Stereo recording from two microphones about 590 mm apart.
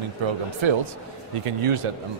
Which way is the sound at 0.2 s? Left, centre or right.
Right.